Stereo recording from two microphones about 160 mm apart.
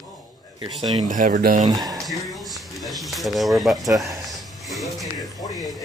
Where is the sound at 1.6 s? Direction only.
25° right (ahead or behind).